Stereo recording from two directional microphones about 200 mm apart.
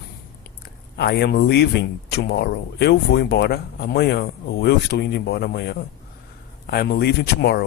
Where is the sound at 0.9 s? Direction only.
55° left (ahead or behind).